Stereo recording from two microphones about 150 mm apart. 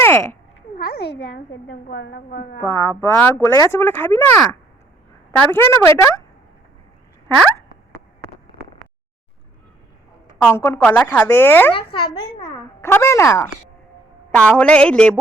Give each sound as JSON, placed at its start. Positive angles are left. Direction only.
{"t": 0.0, "sound": "a sound", "side_deg": 15}
{"t": 0.8, "sound": "a sound", "side_deg": 90}
{"t": 1.7, "sound": "a woman's voice", "side_deg": 85}
{"t": 2.6, "sound": "speech", "side_deg": 20}
{"t": 10.3, "sound": "speech", "side_deg": 10}
{"t": 11.7, "sound": "a child's voice", "side_deg": 35}
{"t": 12.8, "sound": "a woman's voice", "side_deg": 20}
{"t": 14.3, "sound": "speech", "side_deg": 5}